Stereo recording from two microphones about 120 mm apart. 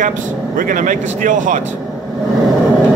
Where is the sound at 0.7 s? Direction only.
90° right.